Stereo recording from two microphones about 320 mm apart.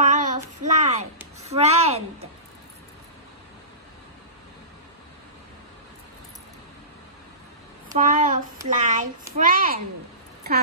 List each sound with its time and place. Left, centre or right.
0.0 s child singing: right
1.5 s speech: centre
7.9 s a sound: right
8.6 s speech: right